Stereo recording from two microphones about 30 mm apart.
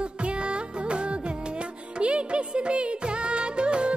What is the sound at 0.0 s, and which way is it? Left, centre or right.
Music, right.